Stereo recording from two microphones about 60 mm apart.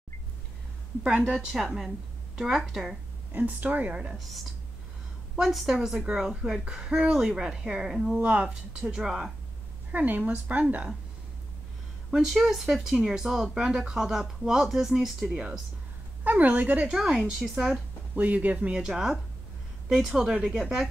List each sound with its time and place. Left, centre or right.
1.6 s a woman's voice: centre
3.3 s speech: right
5.3 s a woman's voice: centre
6.3 s speech: centre
8.2 s speech: right
8.9 s speech: centre
9.9 s speech: right
12.1 s speech: centre
16.3 s speech: right
16.8 s a woman's voice: centre
18.1 s speech: right
18.8 s speech: centre